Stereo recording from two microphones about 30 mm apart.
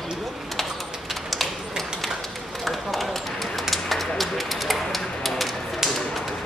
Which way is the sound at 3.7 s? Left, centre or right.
Centre.